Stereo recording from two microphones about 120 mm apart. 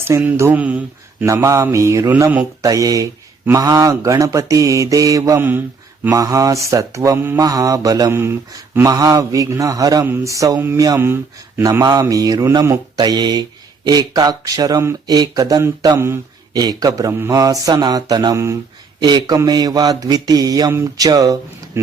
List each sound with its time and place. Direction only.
0.3 s speech: 15° right (ahead or behind)
1.2 s mantra: 25° right (ahead or behind)
2.6 s mantra: 30° right (ahead or behind)
6.1 s mantra: 30° right (ahead or behind)
13.0 s speech: 35° right (ahead or behind)